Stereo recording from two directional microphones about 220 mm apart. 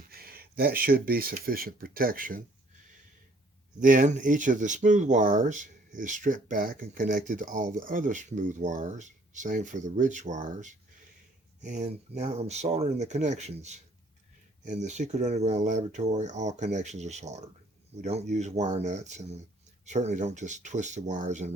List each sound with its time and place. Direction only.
0.1 s speech: 45° right (ahead or behind)
3.8 s speech: 35° right (ahead or behind)